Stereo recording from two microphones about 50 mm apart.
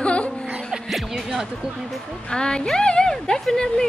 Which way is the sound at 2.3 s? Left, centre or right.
Centre.